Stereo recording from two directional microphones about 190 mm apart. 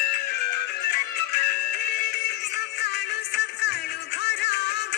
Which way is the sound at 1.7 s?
60° left (ahead or behind).